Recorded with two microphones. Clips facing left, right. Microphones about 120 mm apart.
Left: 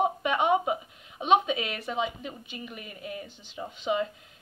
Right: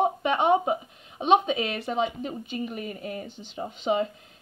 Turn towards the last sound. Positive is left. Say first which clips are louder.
# right 3 dB
turn(degrees=-30)  # may be behind; listen again after turning